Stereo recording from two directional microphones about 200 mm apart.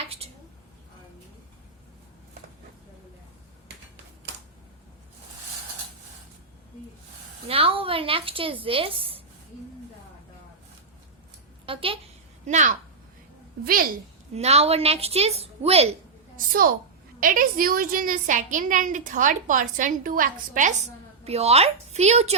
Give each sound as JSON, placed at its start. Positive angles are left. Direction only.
{"t": 7.4, "sound": "a woman's voice", "side_deg": -30}
{"t": 11.6, "sound": "a sound", "side_deg": -25}
{"t": 12.5, "sound": "a woman's voice", "side_deg": -35}
{"t": 14.3, "sound": "a woman's voice", "side_deg": -30}
{"t": 17.2, "sound": "a woman's voice", "side_deg": -45}